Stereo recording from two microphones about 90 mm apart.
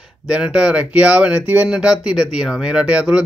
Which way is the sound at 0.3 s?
10° right (ahead or behind).